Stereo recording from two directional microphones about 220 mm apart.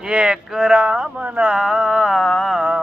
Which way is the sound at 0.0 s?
5° right (ahead or behind).